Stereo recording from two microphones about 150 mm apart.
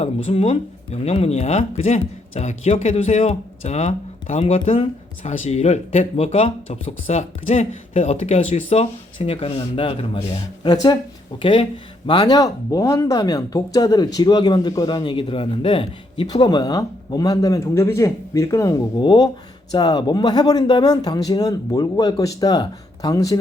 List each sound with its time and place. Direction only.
0.0 s speech: 45° left (ahead or behind); by 10.9 s 30° left (ahead or behind)
12.0 s speech: 30° left (ahead or behind)